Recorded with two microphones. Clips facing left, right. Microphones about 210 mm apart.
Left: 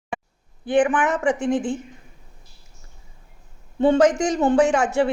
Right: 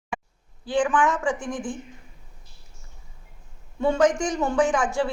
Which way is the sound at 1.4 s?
65° left (ahead or behind).